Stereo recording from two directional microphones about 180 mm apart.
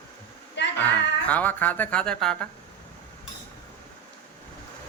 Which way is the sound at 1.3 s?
10° left (ahead or behind).